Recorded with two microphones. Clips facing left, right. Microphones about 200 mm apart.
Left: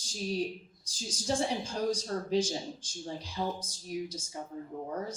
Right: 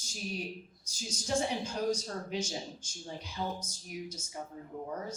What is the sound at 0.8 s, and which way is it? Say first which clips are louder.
Speech: left 3 dB; 30° left (ahead or behind).